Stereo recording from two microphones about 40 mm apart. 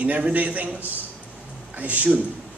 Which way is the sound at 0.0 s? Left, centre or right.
Right.